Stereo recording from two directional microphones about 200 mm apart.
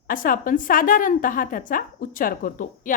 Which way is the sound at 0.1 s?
45° left (ahead or behind).